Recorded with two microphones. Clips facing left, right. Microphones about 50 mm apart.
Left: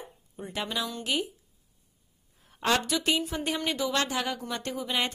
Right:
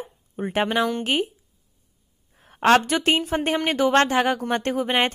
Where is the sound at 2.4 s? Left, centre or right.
Right.